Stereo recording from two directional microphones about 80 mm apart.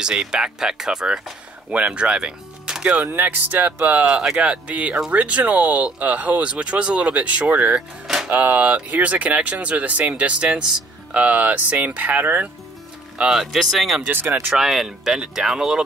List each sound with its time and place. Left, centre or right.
0.0 s speech: centre
3.0 s speech: right
13.2 s speech: centre